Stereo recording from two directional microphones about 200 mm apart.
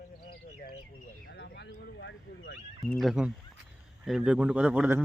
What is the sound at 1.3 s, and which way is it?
Speech, 55° left (ahead or behind).